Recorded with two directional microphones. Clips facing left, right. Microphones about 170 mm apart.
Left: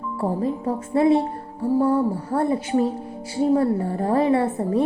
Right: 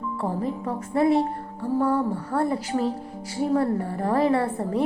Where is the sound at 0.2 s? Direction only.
25° left (ahead or behind).